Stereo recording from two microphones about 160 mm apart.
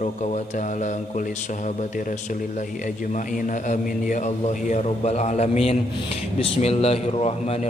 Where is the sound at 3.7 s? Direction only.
50° left (ahead or behind).